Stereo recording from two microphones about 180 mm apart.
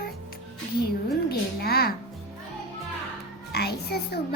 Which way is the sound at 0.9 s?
60° left (ahead or behind).